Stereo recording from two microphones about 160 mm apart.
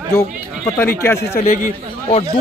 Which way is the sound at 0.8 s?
15° left (ahead or behind).